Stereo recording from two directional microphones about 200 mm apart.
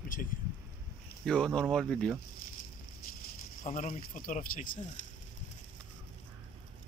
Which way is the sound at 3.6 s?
40° left (ahead or behind).